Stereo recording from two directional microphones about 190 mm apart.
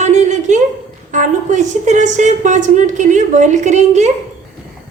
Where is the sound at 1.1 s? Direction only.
40° right (ahead or behind).